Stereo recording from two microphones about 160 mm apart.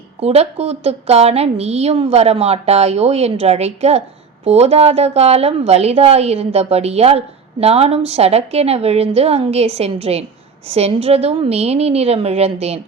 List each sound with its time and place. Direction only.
0.2 s a woman's voice: 40° right (ahead or behind)